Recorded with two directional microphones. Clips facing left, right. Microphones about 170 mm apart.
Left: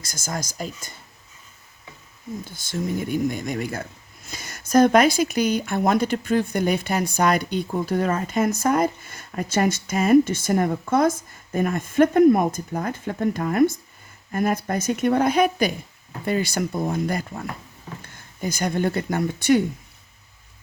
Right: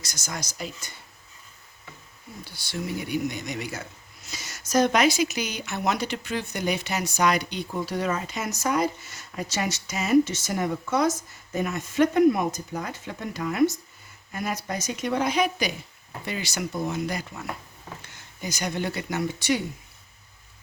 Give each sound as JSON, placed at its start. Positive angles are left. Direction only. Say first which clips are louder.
{"t": 0.0, "sound": "speech", "louder": "left 5 dB", "side_deg": 50}
{"t": 2.4, "sound": "speech", "louder": "left 3 dB", "side_deg": 50}